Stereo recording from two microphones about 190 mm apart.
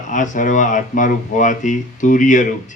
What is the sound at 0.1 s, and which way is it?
A man's voice, 45° left (ahead or behind).